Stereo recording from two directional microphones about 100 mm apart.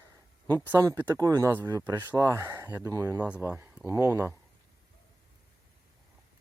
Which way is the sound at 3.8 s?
30° right (ahead or behind).